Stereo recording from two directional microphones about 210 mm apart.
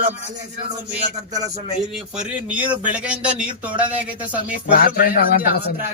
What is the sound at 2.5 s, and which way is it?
Speech, 5° right (ahead or behind).